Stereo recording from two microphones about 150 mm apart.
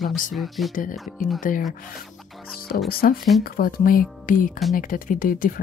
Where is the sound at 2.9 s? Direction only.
90° left.